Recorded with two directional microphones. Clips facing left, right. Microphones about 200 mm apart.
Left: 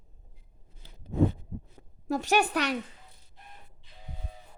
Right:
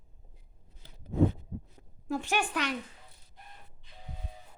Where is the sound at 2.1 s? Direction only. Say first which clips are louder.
Left 5 dB; 40° left (ahead or behind).